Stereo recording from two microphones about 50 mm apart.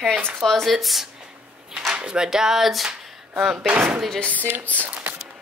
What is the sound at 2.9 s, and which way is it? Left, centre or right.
Speech, centre.